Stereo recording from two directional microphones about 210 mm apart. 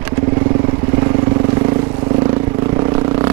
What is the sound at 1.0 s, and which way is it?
Vehicle, 20° right (ahead or behind).